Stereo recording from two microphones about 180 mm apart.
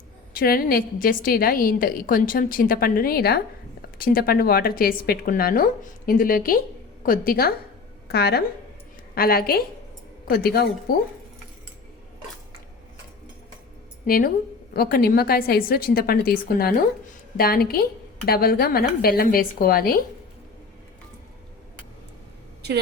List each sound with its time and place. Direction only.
0.3 s a woman's voice: 55° left (ahead or behind)
14.1 s a woman's voice: 50° left (ahead or behind)
17.3 s a woman's voice: 55° left (ahead or behind)